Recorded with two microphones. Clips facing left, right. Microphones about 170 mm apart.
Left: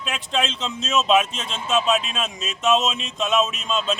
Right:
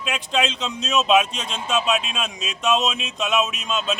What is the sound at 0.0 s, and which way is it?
Speech, centre (ahead or behind).